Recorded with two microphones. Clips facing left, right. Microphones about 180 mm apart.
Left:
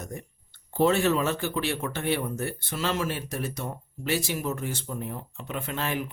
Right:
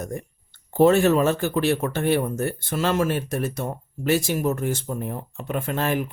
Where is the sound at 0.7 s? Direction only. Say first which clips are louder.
Right 6 dB; 45° right (ahead or behind).